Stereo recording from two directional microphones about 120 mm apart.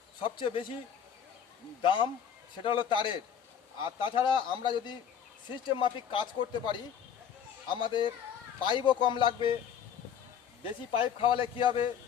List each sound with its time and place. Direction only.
0.2 s speech: 45° left (ahead or behind)
1.8 s speech: 45° left (ahead or behind)
10.6 s speech: 50° left (ahead or behind)